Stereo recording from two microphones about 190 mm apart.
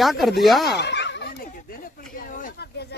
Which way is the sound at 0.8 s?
65° left (ahead or behind).